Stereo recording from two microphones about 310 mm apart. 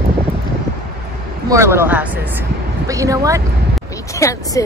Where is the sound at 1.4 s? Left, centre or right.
Centre.